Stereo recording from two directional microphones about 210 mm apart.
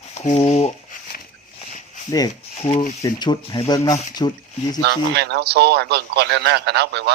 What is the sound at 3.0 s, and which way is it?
Speech, 20° left (ahead or behind).